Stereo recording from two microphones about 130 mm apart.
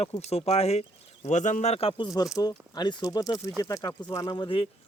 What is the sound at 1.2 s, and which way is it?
Speech, 70° left (ahead or behind).